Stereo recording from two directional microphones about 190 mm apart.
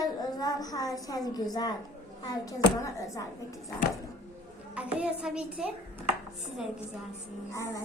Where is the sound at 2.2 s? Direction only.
20° left (ahead or behind).